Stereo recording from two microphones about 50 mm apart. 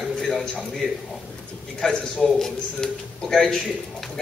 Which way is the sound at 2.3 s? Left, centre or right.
Centre.